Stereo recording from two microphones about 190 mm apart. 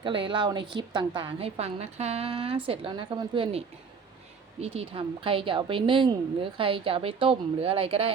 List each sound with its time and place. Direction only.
0.0 s a woman's voice: 25° right (ahead or behind)
4.6 s a woman's voice: 30° right (ahead or behind)